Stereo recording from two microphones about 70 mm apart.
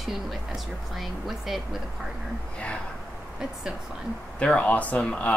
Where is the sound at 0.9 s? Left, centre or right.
Centre.